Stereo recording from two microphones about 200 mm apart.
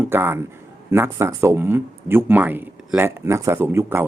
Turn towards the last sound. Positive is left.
turn(degrees=-10)  # may be behind; listen again after turning